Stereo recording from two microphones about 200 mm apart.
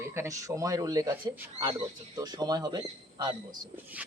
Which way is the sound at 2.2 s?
20° right (ahead or behind).